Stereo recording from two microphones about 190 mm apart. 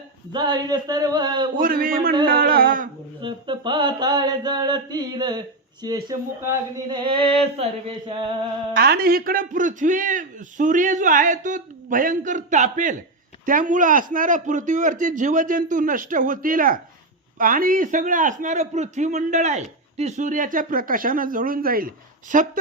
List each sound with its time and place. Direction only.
0.3 s speech: 20° right (ahead or behind)
1.5 s a man's voice: 45° right (ahead or behind)
3.2 s speech: 25° right (ahead or behind)
8.8 s a man's voice: 50° right (ahead or behind)